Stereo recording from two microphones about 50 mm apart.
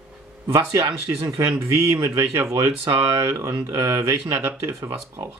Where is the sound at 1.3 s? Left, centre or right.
Right.